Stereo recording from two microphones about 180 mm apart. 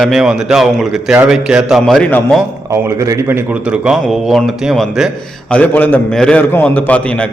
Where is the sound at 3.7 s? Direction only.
5° right (ahead or behind).